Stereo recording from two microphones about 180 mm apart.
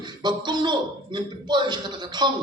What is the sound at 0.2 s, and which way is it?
Speech, 25° right (ahead or behind).